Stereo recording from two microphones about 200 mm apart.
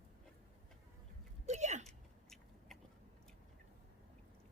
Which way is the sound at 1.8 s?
Centre (ahead or behind).